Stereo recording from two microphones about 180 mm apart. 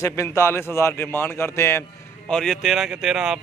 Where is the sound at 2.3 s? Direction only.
Centre (ahead or behind).